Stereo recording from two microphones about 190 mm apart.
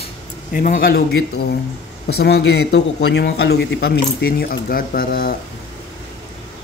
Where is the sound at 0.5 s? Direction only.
45° left (ahead or behind).